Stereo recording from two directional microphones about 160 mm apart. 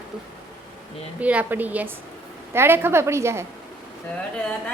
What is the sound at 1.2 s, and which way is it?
A woman's voice, 10° right (ahead or behind).